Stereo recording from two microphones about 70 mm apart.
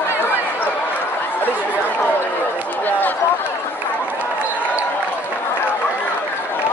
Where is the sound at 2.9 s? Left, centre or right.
Left.